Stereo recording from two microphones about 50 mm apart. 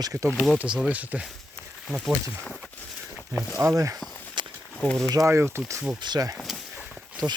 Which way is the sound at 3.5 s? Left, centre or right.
Right.